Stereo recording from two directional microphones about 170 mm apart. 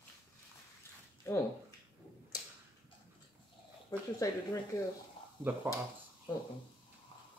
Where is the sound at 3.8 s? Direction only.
20° left (ahead or behind).